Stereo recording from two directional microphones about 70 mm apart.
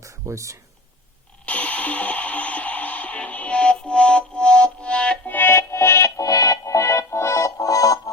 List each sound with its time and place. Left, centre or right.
0.0 s a sound: right
1.5 s music: centre
5.3 s music: left
6.2 s music: left